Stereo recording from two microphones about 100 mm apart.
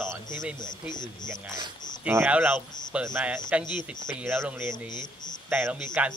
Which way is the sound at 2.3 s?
15° right (ahead or behind).